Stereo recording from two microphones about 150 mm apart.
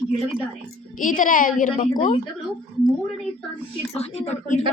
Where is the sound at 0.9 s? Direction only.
60° left (ahead or behind).